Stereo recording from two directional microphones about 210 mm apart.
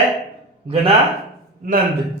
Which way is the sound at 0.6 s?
25° right (ahead or behind).